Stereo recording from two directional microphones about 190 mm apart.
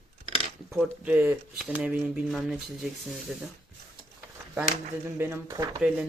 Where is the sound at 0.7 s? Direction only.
10° right (ahead or behind).